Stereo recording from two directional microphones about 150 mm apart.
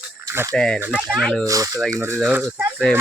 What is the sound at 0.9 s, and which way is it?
Speech, 5° right (ahead or behind).